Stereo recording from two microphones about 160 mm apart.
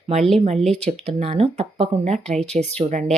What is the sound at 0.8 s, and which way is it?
Speech, 45° right (ahead or behind).